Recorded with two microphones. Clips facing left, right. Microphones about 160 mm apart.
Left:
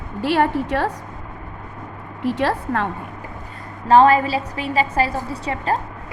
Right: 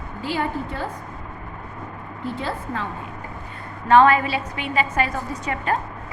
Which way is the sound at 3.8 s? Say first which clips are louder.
Left 2 dB; 35° left (ahead or behind).